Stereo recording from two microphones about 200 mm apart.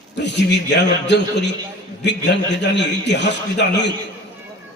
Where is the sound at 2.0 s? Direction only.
60° left (ahead or behind).